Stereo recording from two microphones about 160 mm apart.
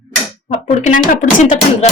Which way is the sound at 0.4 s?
50° left (ahead or behind).